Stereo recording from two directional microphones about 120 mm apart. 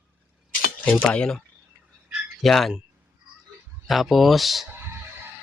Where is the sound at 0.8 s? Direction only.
10° left (ahead or behind).